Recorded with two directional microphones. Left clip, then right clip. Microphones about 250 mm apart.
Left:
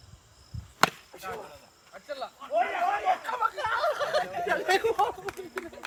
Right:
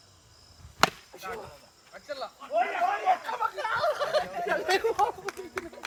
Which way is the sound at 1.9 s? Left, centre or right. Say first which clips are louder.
Even; right.